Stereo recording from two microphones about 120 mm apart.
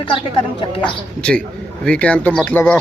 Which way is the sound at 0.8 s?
10° left (ahead or behind).